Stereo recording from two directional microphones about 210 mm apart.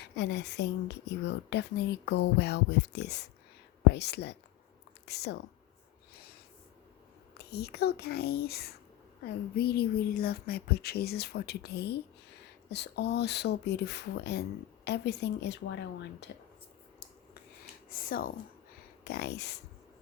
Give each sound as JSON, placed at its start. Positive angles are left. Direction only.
{"t": 0.0, "sound": "speech", "side_deg": 55}
{"t": 7.3, "sound": "speech", "side_deg": 50}
{"t": 17.8, "sound": "speech", "side_deg": 45}